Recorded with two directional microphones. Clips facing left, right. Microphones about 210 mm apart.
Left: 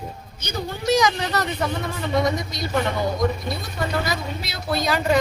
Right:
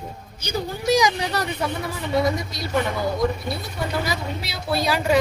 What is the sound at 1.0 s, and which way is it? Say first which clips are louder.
A woman's voice: even; 10° right (ahead or behind).